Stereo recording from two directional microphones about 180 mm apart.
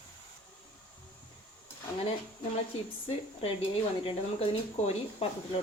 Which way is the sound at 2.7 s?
35° left (ahead or behind).